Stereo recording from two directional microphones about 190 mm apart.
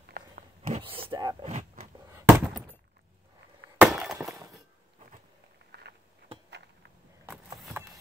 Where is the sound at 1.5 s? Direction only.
35° right (ahead or behind).